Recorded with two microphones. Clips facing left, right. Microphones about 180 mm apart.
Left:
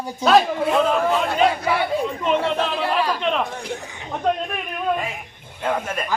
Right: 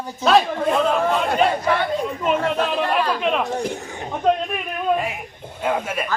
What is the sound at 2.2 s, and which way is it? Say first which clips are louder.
Speech: right 1 dB; 5° right (ahead or behind).